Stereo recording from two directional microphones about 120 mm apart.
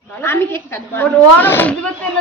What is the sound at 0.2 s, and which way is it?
Speech, 20° left (ahead or behind).